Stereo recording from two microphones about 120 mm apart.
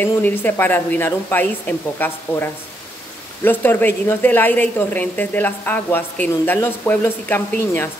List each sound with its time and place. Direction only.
0.0 s a woman's voice: 15° left (ahead or behind)